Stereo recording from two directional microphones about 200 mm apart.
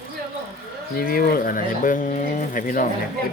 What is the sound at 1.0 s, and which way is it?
Speech, 45° left (ahead or behind).